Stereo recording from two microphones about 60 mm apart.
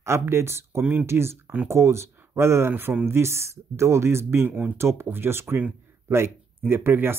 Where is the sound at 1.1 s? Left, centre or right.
Right.